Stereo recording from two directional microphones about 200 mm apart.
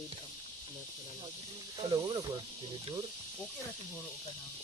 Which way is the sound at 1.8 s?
20° right (ahead or behind).